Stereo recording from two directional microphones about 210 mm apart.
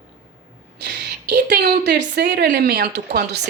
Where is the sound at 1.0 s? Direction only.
50° right (ahead or behind).